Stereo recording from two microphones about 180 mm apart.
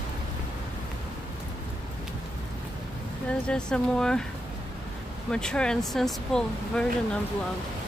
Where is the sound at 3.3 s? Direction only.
5° left (ahead or behind).